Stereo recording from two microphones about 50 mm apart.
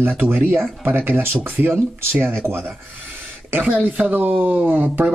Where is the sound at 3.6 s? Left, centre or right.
Right.